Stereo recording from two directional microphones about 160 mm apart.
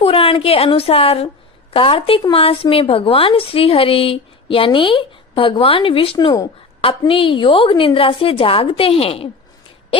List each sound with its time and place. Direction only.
0.0 s a woman's voice: 35° left (ahead or behind)